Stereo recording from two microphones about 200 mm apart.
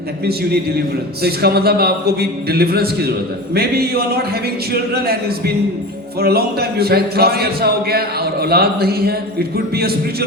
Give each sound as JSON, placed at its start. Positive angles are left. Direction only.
{"t": 1.2, "sound": "a man's voice", "side_deg": -50}
{"t": 6.1, "sound": "a man's voice", "side_deg": -50}